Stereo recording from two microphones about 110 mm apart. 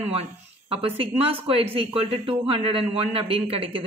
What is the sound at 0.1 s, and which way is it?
Speech, 65° right (ahead or behind).